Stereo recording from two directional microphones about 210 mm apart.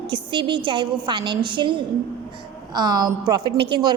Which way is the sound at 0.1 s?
20° right (ahead or behind).